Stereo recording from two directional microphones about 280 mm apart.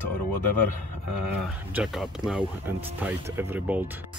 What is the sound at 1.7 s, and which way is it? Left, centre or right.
Speech, centre.